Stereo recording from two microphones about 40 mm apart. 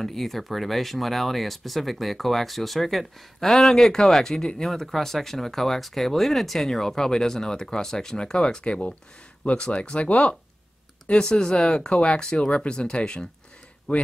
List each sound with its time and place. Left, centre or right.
0.0 s speech: centre
4.6 s speech: centre; by 10.3 s left
11.1 s speech: left
13.9 s speech: left